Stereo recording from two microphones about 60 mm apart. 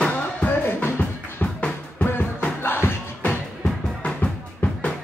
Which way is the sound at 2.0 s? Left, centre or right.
Left.